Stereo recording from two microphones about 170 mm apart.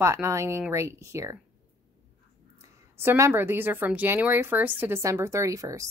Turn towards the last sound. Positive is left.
turn(degrees=-20)  # may be behind; listen again after turning